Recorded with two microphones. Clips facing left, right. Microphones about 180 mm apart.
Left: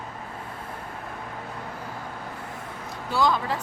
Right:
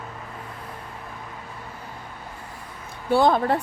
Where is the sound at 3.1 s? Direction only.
55° right (ahead or behind).